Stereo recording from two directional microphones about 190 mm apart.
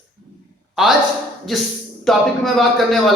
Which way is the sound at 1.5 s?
Centre (ahead or behind).